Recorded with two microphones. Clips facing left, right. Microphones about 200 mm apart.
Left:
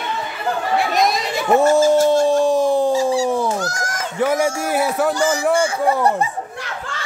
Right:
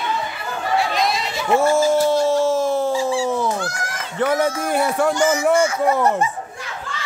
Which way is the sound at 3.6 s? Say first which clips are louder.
Left 3 dB; 40° left (ahead or behind).